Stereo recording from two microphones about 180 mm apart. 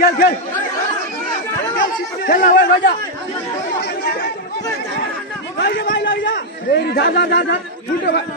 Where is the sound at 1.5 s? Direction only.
15° left (ahead or behind).